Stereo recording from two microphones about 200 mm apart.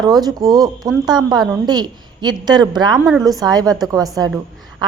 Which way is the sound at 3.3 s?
20° right (ahead or behind).